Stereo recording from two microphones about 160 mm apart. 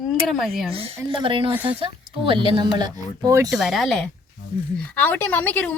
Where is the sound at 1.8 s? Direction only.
35° right (ahead or behind).